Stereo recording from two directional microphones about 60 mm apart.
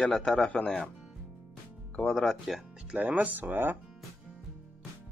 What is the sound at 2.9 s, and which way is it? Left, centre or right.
Speech, right.